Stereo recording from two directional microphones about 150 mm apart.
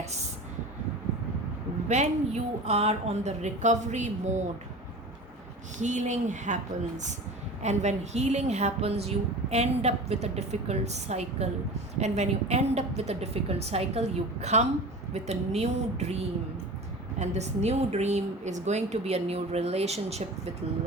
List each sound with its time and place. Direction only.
1.9 s a woman's voice: 50° right (ahead or behind)
5.8 s a woman's voice: 55° right (ahead or behind)
17.2 s a woman's voice: 50° right (ahead or behind)